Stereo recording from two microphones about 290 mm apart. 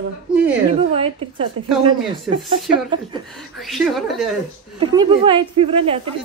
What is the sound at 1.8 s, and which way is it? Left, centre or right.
A woman's voice, centre.